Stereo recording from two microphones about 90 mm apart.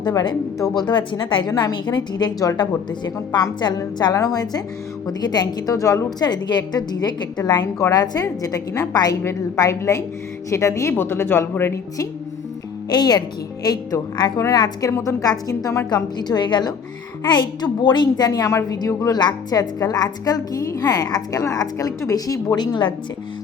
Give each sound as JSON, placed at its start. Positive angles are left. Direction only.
{"t": 0.1, "sound": "a woman's voice", "side_deg": 45}
{"t": 2.4, "sound": "a woman's voice", "side_deg": 40}
{"t": 3.6, "sound": "a woman's voice", "side_deg": 55}
{"t": 9.2, "sound": "a woman's voice", "side_deg": 35}
{"t": 12.9, "sound": "a woman's voice", "side_deg": 50}
{"t": 16.1, "sound": "a woman's voice", "side_deg": 50}
{"t": 18.4, "sound": "a woman's voice", "side_deg": 40}